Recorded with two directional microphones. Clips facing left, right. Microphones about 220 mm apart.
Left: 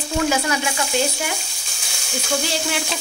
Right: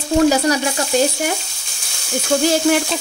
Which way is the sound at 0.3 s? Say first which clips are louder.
Right 5 dB; 40° right (ahead or behind).